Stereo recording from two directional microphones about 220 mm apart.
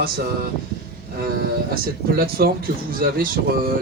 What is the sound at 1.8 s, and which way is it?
Speech, 45° right (ahead or behind).